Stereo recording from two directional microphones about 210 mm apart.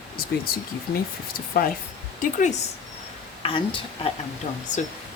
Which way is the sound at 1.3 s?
45° left (ahead or behind).